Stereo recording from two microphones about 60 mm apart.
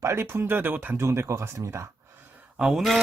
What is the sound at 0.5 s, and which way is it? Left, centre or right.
Speech, right.